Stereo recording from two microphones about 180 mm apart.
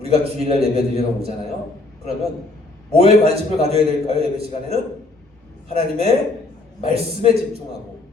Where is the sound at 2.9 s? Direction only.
35° right (ahead or behind).